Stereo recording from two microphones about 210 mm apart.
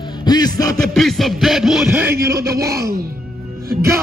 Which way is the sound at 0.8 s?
Centre (ahead or behind).